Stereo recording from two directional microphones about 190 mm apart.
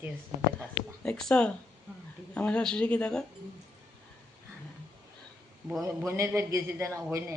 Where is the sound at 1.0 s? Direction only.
5° left (ahead or behind).